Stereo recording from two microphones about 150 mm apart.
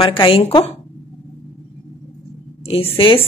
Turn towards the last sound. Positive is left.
turn(degrees=35)  # may be behind; listen again after turning